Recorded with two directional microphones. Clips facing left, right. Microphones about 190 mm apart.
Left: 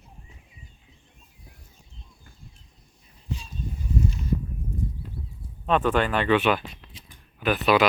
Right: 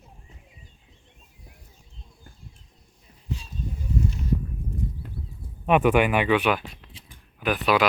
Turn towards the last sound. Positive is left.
turn(degrees=-10)  # may be behind; listen again after turning